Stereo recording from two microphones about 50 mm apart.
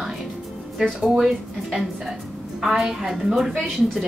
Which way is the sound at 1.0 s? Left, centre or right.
Centre.